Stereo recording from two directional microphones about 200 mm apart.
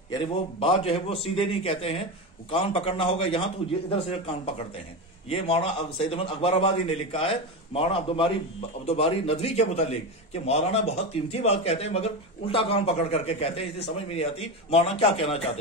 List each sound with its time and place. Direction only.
0.6 s a man's voice: 30° left (ahead or behind)